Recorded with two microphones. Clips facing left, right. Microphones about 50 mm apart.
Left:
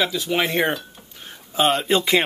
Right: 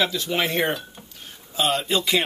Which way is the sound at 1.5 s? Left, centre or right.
Left.